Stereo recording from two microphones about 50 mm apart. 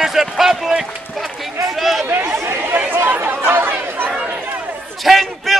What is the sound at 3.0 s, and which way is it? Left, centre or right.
Chatter, right.